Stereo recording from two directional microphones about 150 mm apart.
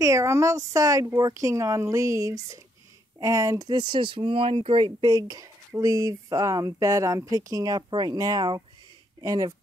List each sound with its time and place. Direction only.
0.0 s speech: 20° right (ahead or behind)